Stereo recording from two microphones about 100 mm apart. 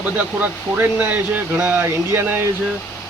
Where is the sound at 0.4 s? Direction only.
15° right (ahead or behind).